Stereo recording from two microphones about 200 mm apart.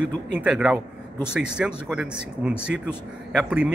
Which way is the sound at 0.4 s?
5° right (ahead or behind).